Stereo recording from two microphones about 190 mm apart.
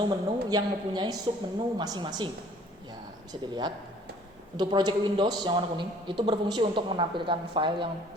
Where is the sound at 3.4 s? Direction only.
25° right (ahead or behind).